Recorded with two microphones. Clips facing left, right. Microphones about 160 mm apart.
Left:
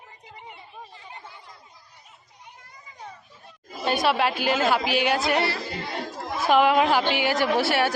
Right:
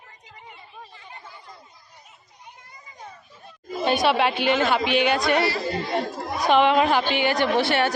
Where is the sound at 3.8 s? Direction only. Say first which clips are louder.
Right 2 dB; centre (ahead or behind).